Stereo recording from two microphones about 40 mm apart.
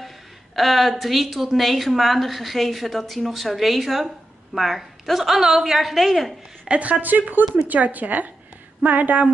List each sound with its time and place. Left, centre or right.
0.6 s a woman's voice: centre
6.7 s speech: right